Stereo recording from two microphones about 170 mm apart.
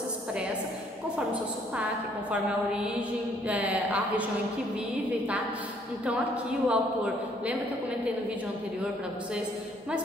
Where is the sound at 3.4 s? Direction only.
10° right (ahead or behind).